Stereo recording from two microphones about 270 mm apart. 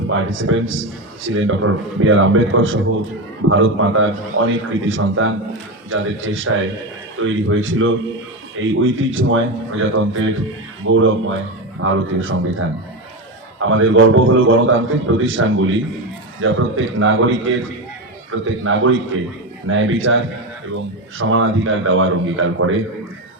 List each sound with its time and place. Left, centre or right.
0.1 s a man's voice: right